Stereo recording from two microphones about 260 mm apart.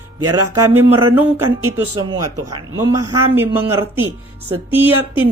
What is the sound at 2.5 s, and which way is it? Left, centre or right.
A woman's voice, centre.